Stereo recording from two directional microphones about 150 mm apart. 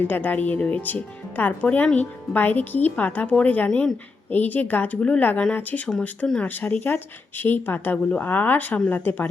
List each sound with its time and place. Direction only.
0.0 s speech: 10° left (ahead or behind)